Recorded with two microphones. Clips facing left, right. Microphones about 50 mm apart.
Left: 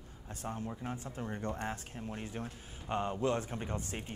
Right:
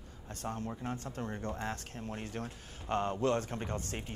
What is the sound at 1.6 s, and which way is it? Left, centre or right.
Speech, centre.